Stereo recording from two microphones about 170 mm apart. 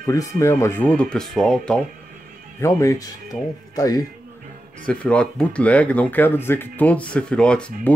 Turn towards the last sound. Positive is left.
turn(degrees=5)  # may be behind; listen again after turning